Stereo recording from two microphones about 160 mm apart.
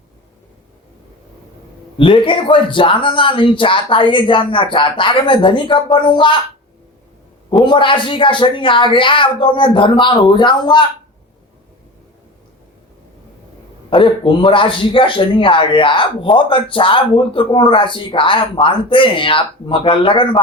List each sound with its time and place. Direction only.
2.0 s a man's voice: 30° left (ahead or behind)
7.5 s a man's voice: 30° left (ahead or behind)
13.9 s a man's voice: 30° left (ahead or behind)